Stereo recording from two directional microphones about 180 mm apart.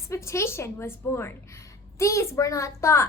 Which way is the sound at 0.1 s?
15° left (ahead or behind).